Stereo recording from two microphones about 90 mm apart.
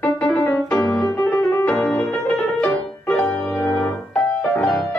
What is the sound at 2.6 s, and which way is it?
Music, 15° left (ahead or behind).